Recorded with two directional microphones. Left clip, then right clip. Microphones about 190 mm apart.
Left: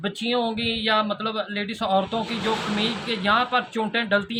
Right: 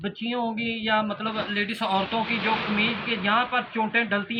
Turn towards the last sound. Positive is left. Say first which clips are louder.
# left 2 dB
turn(degrees=45)  # may be behind; listen again after turning